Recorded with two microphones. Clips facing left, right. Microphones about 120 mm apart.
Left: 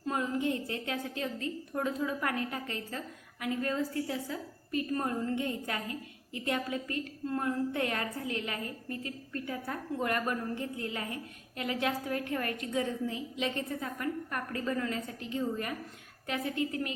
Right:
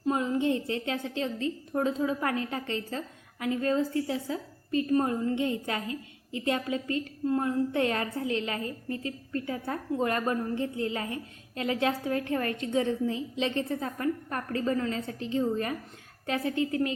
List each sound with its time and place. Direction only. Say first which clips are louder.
0.0 s a woman's voice: right 5 dB; 20° right (ahead or behind)